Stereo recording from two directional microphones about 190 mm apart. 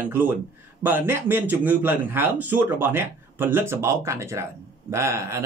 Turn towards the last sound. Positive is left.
turn(degrees=-15)  # may be behind; listen again after turning